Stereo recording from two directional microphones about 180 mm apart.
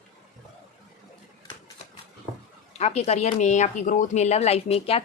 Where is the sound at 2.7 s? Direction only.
35° left (ahead or behind).